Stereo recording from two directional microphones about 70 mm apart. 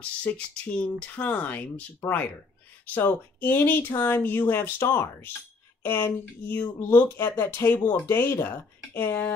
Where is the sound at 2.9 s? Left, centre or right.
Left.